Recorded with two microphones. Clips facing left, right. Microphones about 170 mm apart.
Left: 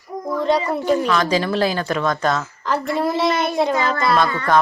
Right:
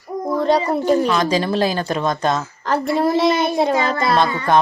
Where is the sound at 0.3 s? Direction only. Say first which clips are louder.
Right 2 dB; 35° right (ahead or behind).